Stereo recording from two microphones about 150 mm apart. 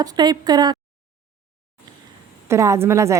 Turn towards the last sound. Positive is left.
turn(degrees=-20)  # may be behind; listen again after turning